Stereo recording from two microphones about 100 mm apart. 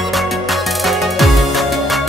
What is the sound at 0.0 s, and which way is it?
Music, centre (ahead or behind).